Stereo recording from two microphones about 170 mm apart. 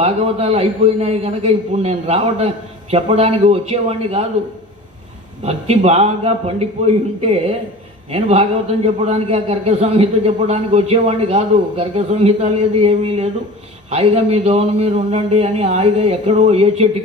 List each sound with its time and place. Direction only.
0.0 s a man's voice: 35° right (ahead or behind)
5.4 s a man's voice: 40° right (ahead or behind)